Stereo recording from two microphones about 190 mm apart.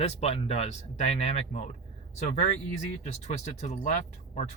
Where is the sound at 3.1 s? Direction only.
35° left (ahead or behind).